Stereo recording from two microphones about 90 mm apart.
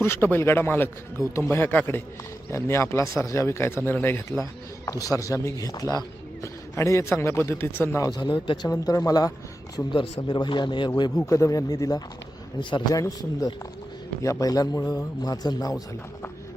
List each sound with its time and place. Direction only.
0.0 s a man's voice: 25° left (ahead or behind)
4.9 s speech: 40° left (ahead or behind)
6.4 s a man's voice: 35° left (ahead or behind)
8.0 s a man's voice: 45° left (ahead or behind)
8.3 s speech: 70° left (ahead or behind)
8.7 s a man's voice: 45° left (ahead or behind)
9.9 s a man's voice: 65° left (ahead or behind)
11.3 s a man's voice: 35° left (ahead or behind)